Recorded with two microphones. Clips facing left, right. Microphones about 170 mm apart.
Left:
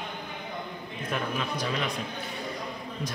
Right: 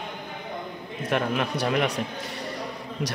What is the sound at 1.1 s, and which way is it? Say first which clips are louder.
Speech: right 6 dB; 70° right (ahead or behind).